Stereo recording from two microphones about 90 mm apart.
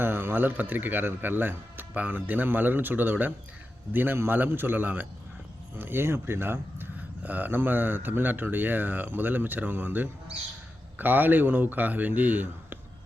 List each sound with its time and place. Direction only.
0.0 s speech: 25° right (ahead or behind)